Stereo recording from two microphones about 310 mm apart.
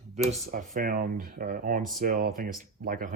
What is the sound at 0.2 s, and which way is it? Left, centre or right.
Speech, right.